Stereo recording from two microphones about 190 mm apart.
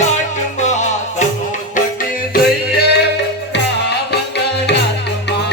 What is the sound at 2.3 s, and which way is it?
Music, 55° left (ahead or behind).